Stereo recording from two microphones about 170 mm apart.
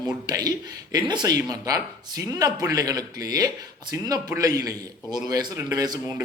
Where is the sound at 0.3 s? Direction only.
25° right (ahead or behind).